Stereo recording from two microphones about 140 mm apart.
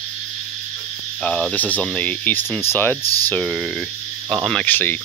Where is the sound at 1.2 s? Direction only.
5° left (ahead or behind).